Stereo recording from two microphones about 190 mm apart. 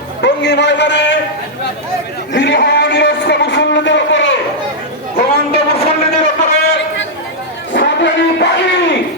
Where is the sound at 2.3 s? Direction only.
65° left (ahead or behind).